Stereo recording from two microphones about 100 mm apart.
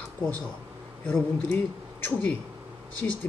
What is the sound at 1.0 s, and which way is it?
Speech, 10° left (ahead or behind).